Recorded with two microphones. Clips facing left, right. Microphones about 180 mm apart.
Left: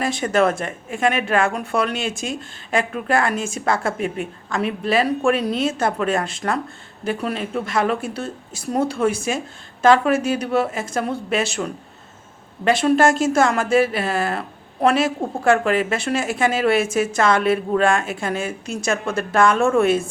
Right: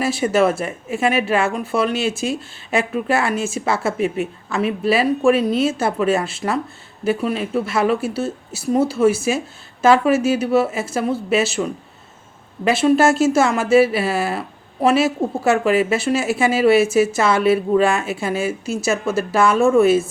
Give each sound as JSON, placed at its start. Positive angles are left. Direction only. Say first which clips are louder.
{"t": 0.0, "sound": "speech", "louder": "right 2 dB", "side_deg": -5}